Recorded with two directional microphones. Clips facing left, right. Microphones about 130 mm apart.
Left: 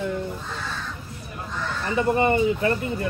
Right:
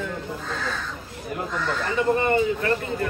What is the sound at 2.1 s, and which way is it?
Speech, 20° left (ahead or behind).